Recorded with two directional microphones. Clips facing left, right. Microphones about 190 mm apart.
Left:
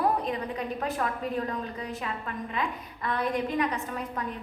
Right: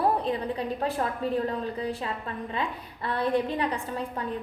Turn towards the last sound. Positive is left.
turn(degrees=-30)  # may be behind; listen again after turning